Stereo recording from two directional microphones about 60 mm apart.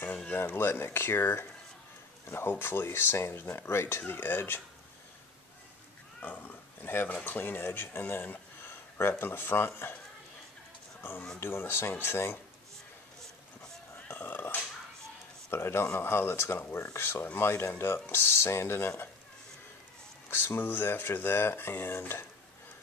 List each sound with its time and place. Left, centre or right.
0.3 s speech: left
6.2 s speech: left
11.0 s speech: left
14.1 s music: left
15.5 s speech: left
20.2 s speech: left